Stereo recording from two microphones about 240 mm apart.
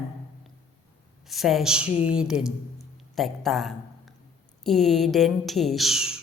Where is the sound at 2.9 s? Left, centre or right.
Centre.